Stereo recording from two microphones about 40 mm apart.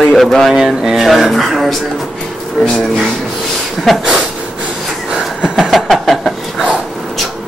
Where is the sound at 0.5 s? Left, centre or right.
Centre.